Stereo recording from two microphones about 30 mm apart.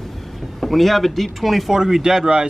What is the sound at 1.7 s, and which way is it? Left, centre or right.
Speech, centre.